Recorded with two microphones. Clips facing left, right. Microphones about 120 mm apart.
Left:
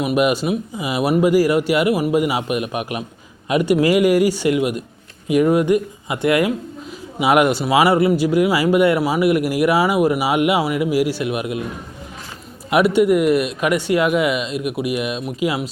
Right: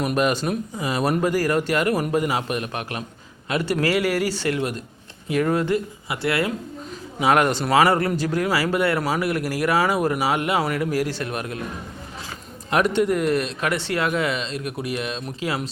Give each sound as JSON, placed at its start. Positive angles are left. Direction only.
{"t": 0.0, "sound": "speech", "side_deg": 10}
{"t": 12.7, "sound": "speech", "side_deg": 10}